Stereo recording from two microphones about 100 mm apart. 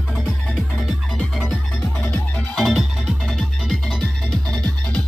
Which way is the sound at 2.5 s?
Centre (ahead or behind).